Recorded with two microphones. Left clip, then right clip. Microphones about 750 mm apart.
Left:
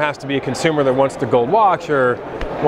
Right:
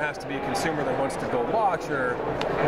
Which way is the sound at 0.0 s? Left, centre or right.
Left.